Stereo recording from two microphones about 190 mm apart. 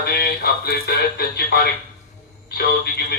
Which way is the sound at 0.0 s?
55° left (ahead or behind).